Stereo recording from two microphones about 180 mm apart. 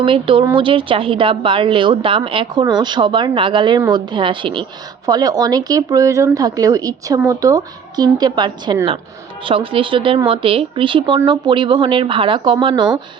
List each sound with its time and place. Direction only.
0.0 s a woman's voice: 30° right (ahead or behind)